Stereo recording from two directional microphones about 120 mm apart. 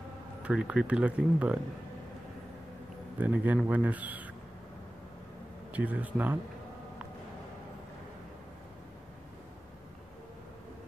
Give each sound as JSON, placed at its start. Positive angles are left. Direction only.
{"t": 0.4, "sound": "speech", "side_deg": -10}
{"t": 3.2, "sound": "speech", "side_deg": -15}
{"t": 5.7, "sound": "speech", "side_deg": -15}